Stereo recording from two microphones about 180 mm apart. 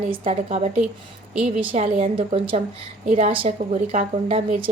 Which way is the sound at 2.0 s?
30° right (ahead or behind).